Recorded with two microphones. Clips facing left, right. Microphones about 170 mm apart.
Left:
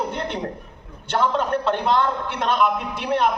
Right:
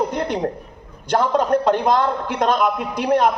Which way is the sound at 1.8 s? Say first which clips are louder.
Right 3 dB; 40° right (ahead or behind).